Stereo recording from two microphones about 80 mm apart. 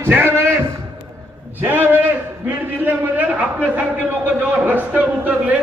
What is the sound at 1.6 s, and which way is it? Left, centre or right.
A man's voice, right.